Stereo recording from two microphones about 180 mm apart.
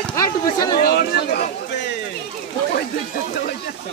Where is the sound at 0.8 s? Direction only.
60° left (ahead or behind).